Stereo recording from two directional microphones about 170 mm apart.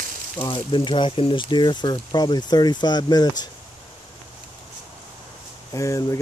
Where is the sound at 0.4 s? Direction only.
30° left (ahead or behind).